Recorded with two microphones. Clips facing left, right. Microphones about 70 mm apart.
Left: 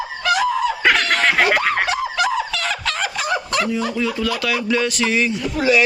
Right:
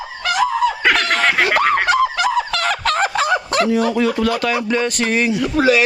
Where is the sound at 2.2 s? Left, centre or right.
Right.